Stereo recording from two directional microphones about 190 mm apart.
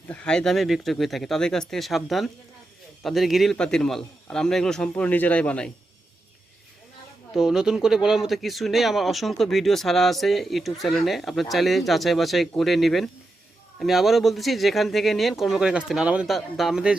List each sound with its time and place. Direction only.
0.1 s speech: 5° left (ahead or behind)
7.3 s speech: 5° right (ahead or behind)